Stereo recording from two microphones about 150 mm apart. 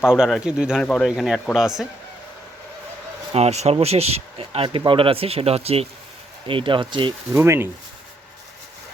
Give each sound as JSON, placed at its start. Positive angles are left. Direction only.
{"t": 0.0, "sound": "speech", "side_deg": -5}
{"t": 3.3, "sound": "speech", "side_deg": -45}
{"t": 7.3, "sound": "speech", "side_deg": -15}